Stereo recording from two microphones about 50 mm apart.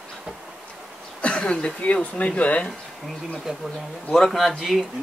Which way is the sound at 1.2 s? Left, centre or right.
Left.